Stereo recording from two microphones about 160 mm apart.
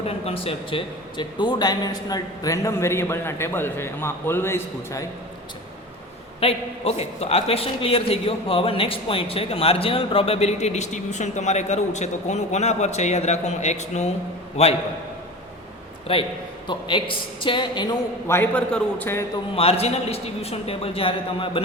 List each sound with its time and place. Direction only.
0.0 s a man's voice: 35° left (ahead or behind); by 5.0 s 15° left (ahead or behind)
6.4 s a man's voice: 40° left (ahead or behind)
16.1 s a man's voice: 35° left (ahead or behind)
18.3 s a man's voice: 10° left (ahead or behind)
19.5 s a man's voice: 35° left (ahead or behind)